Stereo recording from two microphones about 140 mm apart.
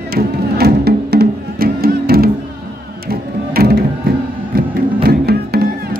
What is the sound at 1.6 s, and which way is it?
Music, 90° right.